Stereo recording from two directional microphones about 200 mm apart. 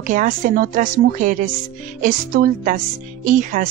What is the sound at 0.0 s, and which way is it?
A woman's voice, 40° right (ahead or behind).